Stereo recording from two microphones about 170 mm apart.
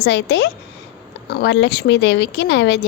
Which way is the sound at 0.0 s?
90° left.